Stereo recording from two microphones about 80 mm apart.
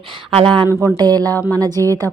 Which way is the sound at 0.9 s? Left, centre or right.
Right.